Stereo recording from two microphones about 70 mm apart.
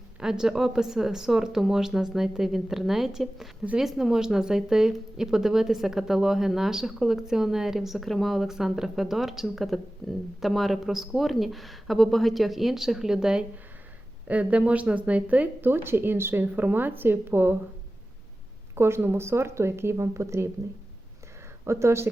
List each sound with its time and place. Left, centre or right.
0.2 s speech: centre
14.3 s speech: centre
18.7 s speech: right
21.6 s speech: right